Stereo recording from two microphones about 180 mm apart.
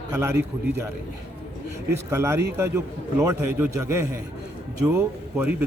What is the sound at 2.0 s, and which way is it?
A man's voice, 15° right (ahead or behind).